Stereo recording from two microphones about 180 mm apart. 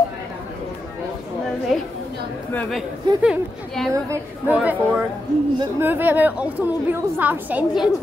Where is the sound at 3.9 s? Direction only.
15° right (ahead or behind).